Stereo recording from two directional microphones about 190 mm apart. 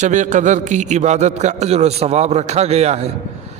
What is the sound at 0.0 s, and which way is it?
A man's voice, 40° right (ahead or behind).